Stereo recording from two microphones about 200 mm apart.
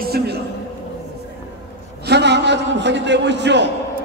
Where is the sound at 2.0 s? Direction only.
60° right (ahead or behind).